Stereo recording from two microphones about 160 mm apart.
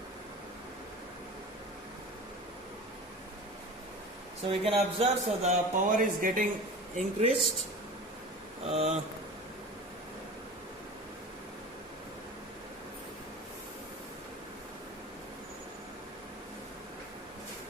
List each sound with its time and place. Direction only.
4.4 s speech: 35° right (ahead or behind); by 6.5 s 55° right (ahead or behind)
6.9 s speech: 45° right (ahead or behind)
8.6 s speech: 40° right (ahead or behind)